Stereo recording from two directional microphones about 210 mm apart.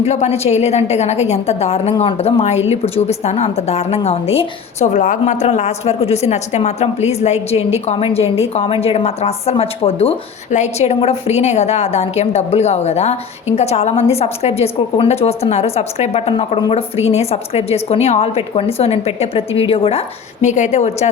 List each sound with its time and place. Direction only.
0.0 s a woman's voice: 30° left (ahead or behind)